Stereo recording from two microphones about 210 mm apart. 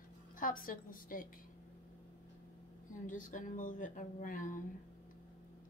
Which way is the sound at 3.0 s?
40° left (ahead or behind).